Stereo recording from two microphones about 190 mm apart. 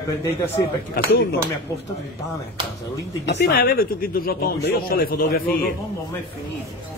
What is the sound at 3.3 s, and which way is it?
Speech, 55° left (ahead or behind).